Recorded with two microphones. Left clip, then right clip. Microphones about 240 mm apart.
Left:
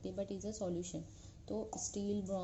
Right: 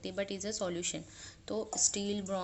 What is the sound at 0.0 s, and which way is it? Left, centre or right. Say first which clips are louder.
Speech: right 5 dB; centre.